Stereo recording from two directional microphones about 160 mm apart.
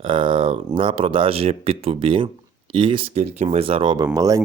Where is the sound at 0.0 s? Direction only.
30° right (ahead or behind).